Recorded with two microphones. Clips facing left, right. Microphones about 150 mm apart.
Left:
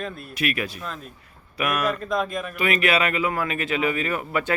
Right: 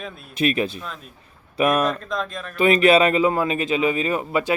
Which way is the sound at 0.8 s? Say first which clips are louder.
Left 1 dB; centre (ahead or behind).